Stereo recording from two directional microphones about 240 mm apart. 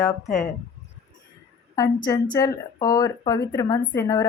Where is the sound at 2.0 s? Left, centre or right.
Centre.